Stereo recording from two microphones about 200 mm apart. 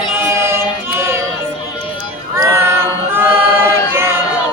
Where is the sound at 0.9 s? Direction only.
10° right (ahead or behind).